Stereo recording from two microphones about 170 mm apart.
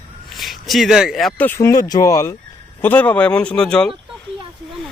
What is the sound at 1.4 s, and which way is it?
Speech, 15° left (ahead or behind).